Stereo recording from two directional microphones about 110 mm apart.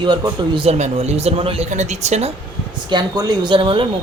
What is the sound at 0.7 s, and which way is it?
Speech, 80° right.